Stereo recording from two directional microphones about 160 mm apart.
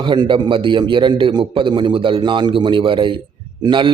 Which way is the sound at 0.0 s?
30° right (ahead or behind).